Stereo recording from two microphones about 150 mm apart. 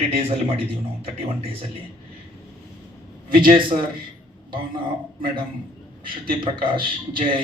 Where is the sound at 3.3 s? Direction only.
35° right (ahead or behind).